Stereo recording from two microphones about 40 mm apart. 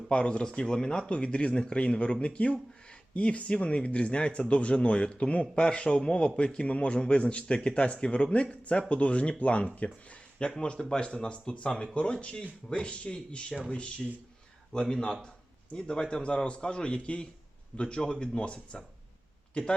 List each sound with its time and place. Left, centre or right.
0.1 s a man's voice: left
5.6 s a man's voice: left
10.8 s a man's voice: centre